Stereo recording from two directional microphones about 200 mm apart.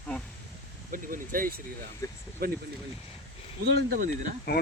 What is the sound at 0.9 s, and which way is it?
Speech, 45° right (ahead or behind).